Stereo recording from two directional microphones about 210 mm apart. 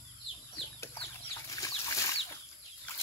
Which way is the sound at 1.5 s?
15° left (ahead or behind).